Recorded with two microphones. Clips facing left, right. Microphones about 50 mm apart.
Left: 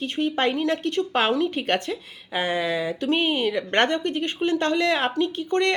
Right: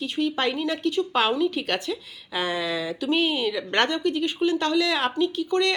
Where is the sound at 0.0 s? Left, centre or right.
Left.